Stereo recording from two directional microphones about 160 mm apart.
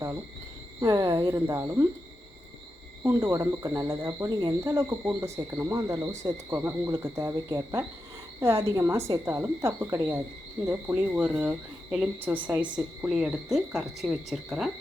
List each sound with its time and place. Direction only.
0.8 s speech: 20° right (ahead or behind)
3.0 s a woman's voice: 20° right (ahead or behind); by 14.7 s centre (ahead or behind)